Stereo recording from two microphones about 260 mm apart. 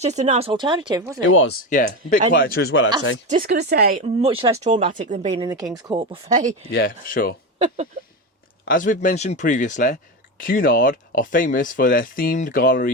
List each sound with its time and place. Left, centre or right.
0.0 s speech: right
1.2 s speech: left
1.7 s speech: left
3.4 s speech: right
4.0 s speech: right
5.5 s speech: centre
6.7 s speech: left
8.6 s speech: left